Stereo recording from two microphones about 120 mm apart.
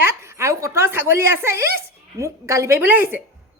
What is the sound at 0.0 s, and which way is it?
Speech, 20° right (ahead or behind).